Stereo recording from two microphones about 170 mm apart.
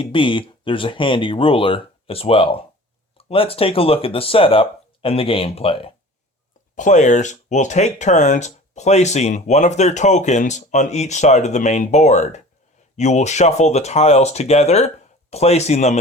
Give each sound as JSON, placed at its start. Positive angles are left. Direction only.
{"t": 0.0, "sound": "speech", "side_deg": 30}
{"t": 6.7, "sound": "speech", "side_deg": 45}